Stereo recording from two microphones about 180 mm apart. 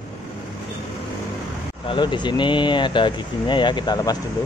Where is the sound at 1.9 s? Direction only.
25° left (ahead or behind).